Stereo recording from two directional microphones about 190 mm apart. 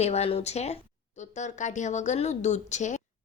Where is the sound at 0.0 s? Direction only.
35° left (ahead or behind).